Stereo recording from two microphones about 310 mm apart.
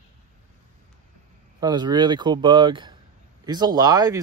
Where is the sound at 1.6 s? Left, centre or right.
Centre.